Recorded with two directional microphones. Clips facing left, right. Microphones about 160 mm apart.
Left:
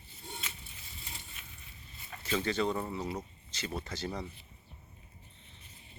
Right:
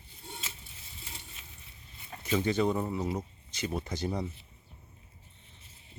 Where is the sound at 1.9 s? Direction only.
15° right (ahead or behind).